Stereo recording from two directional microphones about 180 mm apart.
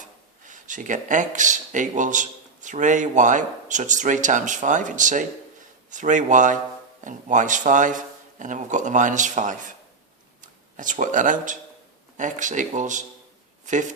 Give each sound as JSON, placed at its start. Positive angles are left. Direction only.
{"t": 0.0, "sound": "speech", "side_deg": -45}